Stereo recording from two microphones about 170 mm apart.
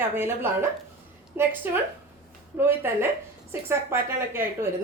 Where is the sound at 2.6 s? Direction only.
15° right (ahead or behind).